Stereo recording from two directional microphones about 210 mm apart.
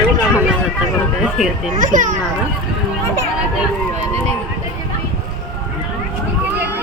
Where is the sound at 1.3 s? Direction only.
Centre (ahead or behind).